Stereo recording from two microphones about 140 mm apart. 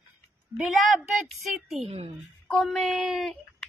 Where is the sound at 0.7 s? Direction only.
Centre (ahead or behind).